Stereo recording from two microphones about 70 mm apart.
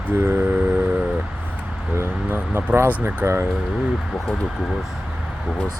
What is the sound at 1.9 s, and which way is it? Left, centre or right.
Speech, right.